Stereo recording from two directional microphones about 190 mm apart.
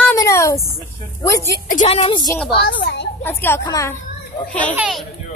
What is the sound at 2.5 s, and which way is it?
Speech, 60° left (ahead or behind).